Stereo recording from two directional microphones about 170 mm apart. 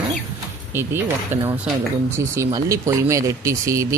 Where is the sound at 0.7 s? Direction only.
15° right (ahead or behind).